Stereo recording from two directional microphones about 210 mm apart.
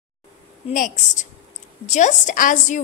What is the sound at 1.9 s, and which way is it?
Speech, 35° left (ahead or behind).